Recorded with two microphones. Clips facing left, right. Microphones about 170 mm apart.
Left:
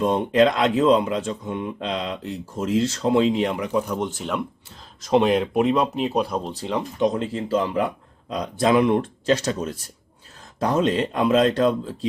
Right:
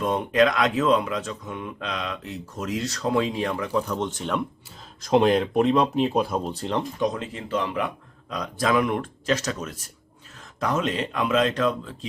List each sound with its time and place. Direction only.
0.0 s speech: 30° left (ahead or behind); by 6.8 s centre (ahead or behind)
7.0 s speech: 30° left (ahead or behind)